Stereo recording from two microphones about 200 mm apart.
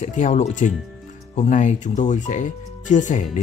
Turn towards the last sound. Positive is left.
turn(degrees=40)  # may be behind; listen again after turning